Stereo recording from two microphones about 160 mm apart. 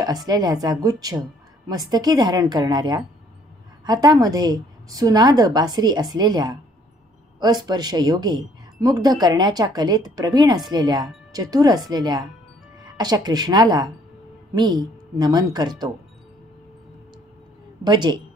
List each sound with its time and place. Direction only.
0.3 s speech: 25° right (ahead or behind)
17.8 s speech: 30° right (ahead or behind)